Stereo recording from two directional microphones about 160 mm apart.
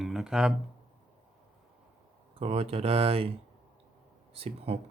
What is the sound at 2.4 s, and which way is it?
Speech, 40° right (ahead or behind).